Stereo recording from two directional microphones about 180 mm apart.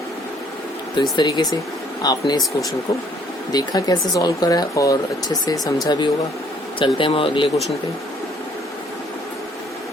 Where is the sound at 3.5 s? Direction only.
20° left (ahead or behind).